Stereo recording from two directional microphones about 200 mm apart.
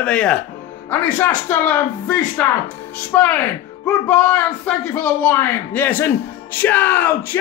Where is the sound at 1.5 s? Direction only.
10° left (ahead or behind).